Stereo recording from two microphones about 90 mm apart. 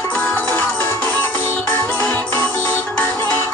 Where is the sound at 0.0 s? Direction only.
20° left (ahead or behind).